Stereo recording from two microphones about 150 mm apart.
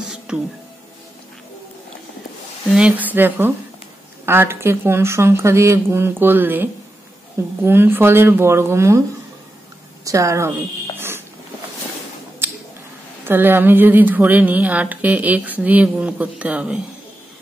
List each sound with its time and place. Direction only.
0.3 s speech: 5° right (ahead or behind)
2.7 s speech: 10° right (ahead or behind)
10.0 s speech: 20° right (ahead or behind)
11.0 s a sound: 15° right (ahead or behind)
13.2 s speech: 15° right (ahead or behind)